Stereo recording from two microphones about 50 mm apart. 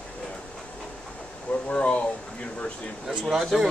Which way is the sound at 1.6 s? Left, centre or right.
Left.